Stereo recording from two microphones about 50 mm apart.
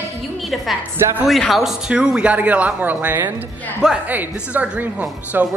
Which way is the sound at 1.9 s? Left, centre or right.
Centre.